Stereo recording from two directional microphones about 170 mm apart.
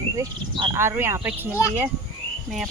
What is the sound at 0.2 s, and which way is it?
Speech, 25° right (ahead or behind).